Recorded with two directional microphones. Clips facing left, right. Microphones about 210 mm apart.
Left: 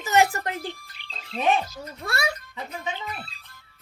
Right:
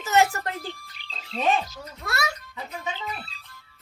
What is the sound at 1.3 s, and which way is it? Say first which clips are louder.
Speech: left 1 dB; 5° left (ahead or behind).